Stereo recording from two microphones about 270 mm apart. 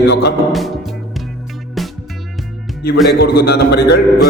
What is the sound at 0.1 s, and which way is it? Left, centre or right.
Music, left.